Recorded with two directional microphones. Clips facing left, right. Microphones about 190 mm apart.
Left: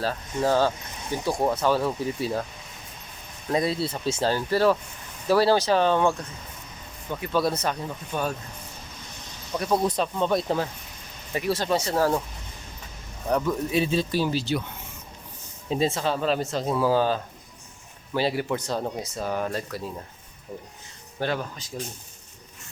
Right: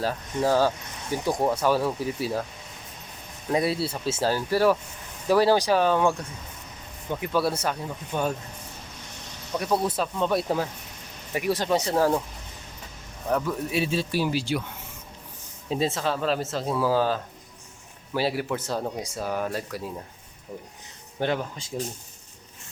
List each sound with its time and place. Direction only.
0.0 s speech: 10° right (ahead or behind)
3.5 s speech: 10° right (ahead or behind)
9.6 s speech: 5° right (ahead or behind)
13.3 s speech: 5° right (ahead or behind)
15.7 s speech: centre (ahead or behind)
21.2 s speech: 20° right (ahead or behind)